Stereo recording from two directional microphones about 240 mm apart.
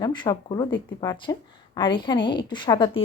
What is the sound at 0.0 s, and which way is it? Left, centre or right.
Speech, centre.